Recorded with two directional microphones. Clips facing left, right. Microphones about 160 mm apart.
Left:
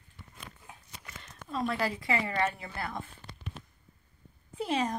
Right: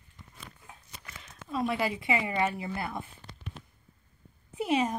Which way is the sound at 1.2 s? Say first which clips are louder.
Right 2 dB; centre (ahead or behind).